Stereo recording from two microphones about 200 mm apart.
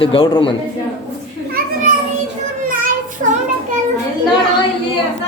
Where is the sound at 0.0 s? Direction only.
25° left (ahead or behind).